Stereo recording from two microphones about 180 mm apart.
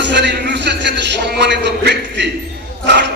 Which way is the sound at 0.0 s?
70° right (ahead or behind).